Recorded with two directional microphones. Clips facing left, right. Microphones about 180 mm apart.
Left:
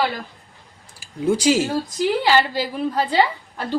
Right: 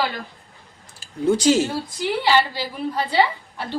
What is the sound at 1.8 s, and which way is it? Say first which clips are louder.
A woman's voice: left 3 dB; 45° left (ahead or behind).